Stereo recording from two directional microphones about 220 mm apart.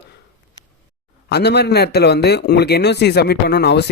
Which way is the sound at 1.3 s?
45° left (ahead or behind).